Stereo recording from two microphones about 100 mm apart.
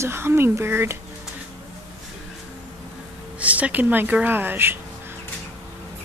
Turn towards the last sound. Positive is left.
turn(degrees=-20)  # may be behind; listen again after turning